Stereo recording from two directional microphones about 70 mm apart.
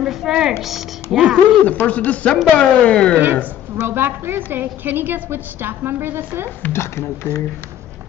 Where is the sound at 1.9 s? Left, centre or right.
Left.